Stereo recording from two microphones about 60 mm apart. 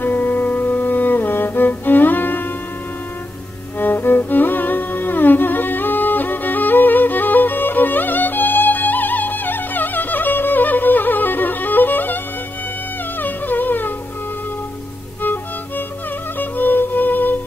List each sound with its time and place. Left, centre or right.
0.0 s music: left
3.8 s music: left
13.2 s music: left
16.3 s music: left